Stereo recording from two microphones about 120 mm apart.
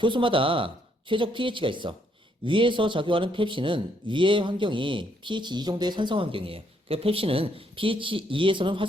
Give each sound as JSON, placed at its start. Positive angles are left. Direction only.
{"t": 0.0, "sound": "speech", "side_deg": -45}